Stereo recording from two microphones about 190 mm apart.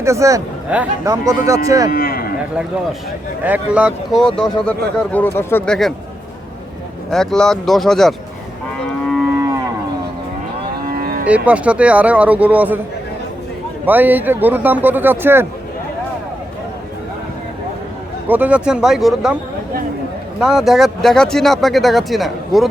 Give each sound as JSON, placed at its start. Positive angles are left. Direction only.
{"t": 0.0, "sound": "a man's voice", "side_deg": -15}
{"t": 1.9, "sound": "speech", "side_deg": 50}
{"t": 3.4, "sound": "speech", "side_deg": -10}
{"t": 7.1, "sound": "speech", "side_deg": 0}
{"t": 11.0, "sound": "moo", "side_deg": -50}
{"t": 11.3, "sound": "a man's voice", "side_deg": -5}
{"t": 13.8, "sound": "a man's voice", "side_deg": -10}
{"t": 18.3, "sound": "speech", "side_deg": -10}
{"t": 20.4, "sound": "speech", "side_deg": -5}